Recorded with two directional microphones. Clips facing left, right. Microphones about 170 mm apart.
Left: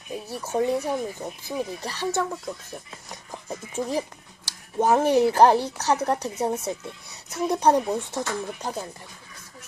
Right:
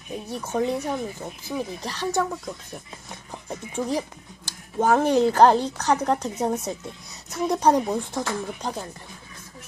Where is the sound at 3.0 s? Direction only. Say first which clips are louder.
Even; 10° left (ahead or behind).